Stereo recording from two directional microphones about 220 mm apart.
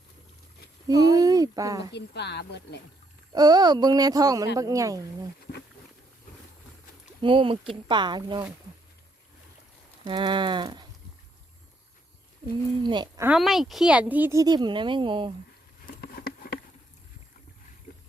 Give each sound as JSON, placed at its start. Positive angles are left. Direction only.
{"t": 0.9, "sound": "speech", "side_deg": -15}
{"t": 1.9, "sound": "speech", "side_deg": 50}
{"t": 3.3, "sound": "speech", "side_deg": -15}
{"t": 5.5, "sound": "insect", "side_deg": 40}
{"t": 7.2, "sound": "livestock", "side_deg": -25}
{"t": 10.1, "sound": "livestock", "side_deg": -20}
{"t": 12.8, "sound": "livestock", "side_deg": -20}
{"t": 13.2, "sound": "speech", "side_deg": 0}
{"t": 16.0, "sound": "patter", "side_deg": 45}